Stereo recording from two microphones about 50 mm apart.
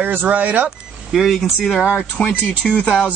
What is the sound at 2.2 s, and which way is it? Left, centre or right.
Speech, left.